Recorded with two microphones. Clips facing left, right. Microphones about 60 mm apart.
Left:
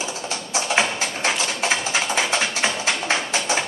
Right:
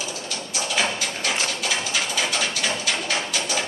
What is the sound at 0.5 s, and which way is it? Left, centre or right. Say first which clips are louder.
Music: left 3 dB; left.